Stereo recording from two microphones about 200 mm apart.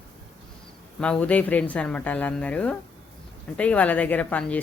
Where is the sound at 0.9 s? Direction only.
5° left (ahead or behind).